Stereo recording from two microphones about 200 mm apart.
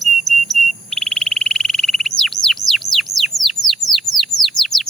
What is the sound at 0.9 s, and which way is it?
Bird, centre (ahead or behind).